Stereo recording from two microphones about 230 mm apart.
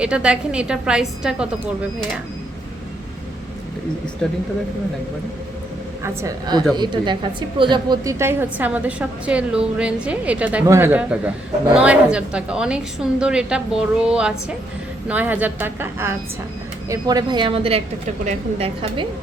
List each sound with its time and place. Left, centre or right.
0.0 s a woman's voice: centre
4.2 s a woman's voice: centre
6.0 s a woman's voice: centre